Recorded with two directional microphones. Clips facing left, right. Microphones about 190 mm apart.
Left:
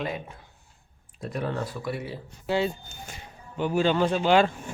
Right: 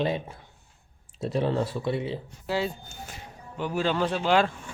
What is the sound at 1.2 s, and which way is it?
Speech, 25° right (ahead or behind).